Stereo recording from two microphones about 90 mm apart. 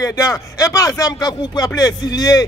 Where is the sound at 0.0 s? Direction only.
40° left (ahead or behind).